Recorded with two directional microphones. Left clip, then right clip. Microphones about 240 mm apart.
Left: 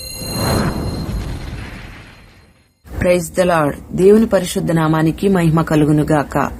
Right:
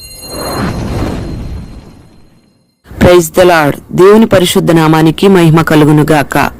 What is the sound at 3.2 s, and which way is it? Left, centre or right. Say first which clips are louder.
Speech: right 9 dB; right.